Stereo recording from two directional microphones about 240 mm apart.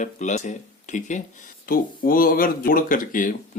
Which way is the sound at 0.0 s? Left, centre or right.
Left.